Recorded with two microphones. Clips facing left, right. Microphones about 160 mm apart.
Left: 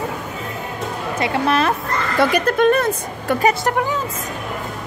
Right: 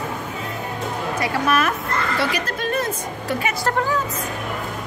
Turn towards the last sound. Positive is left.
turn(degrees=20)  # may be behind; listen again after turning